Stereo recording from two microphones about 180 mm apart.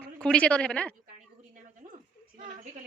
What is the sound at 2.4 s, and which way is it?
Speech, 45° right (ahead or behind).